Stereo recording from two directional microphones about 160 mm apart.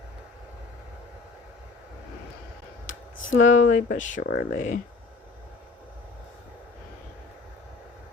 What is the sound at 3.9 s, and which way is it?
Speech, 55° left (ahead or behind).